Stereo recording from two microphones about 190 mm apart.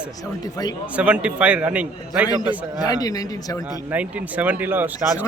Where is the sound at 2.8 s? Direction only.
20° left (ahead or behind).